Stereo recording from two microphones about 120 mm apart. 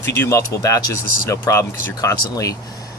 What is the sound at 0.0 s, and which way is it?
Speech, 25° left (ahead or behind).